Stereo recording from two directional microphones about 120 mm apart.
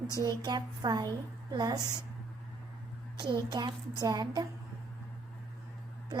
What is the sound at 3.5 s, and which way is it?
Speech, 35° right (ahead or behind).